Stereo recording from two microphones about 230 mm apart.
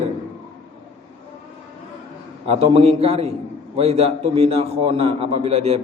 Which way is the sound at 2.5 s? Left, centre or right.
Right.